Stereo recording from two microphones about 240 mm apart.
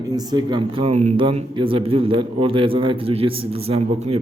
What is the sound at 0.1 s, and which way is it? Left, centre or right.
A man's voice, centre.